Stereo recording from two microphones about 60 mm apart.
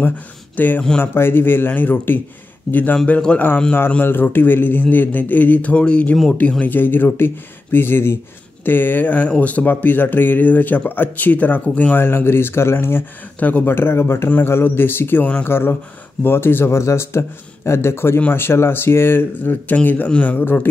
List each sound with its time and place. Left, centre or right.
0.6 s speech: left
4.0 s speech: left; by 6.1 s centre
6.6 s speech: left
12.0 s speech: left